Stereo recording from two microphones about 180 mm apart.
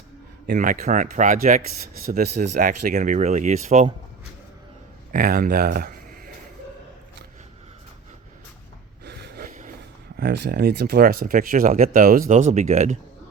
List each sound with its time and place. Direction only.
0.4 s speech: 50° right (ahead or behind)
1.8 s speech: 55° right (ahead or behind); by 3.8 s 40° right (ahead or behind)
5.1 s speech: 55° right (ahead or behind)
9.0 s snort: 65° right (ahead or behind)
9.5 s a sound: 45° right (ahead or behind)
10.2 s speech: 60° right (ahead or behind); by 13.0 s 40° right (ahead or behind)